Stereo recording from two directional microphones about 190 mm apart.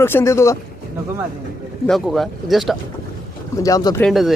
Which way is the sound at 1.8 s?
Centre (ahead or behind).